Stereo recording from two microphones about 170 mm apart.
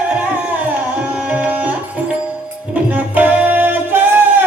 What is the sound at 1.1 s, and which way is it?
Tabla, 10° right (ahead or behind).